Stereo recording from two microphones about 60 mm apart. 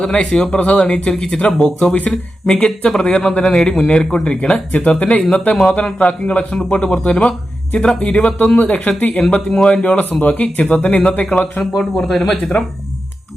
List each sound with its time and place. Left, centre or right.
0.0 s a man's voice: centre
11.8 s a man's voice: centre